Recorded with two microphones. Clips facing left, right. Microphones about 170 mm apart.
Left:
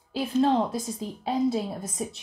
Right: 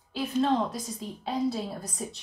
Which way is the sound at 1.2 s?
20° left (ahead or behind).